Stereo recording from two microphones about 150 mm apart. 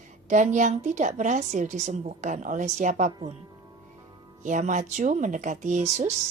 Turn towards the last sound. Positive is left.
turn(degrees=-50)  # may be behind; listen again after turning